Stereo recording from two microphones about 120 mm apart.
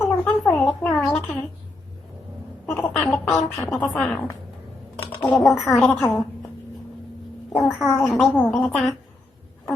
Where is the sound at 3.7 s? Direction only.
10° left (ahead or behind).